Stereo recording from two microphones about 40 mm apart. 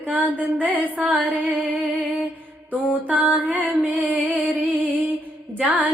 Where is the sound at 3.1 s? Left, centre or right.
Right.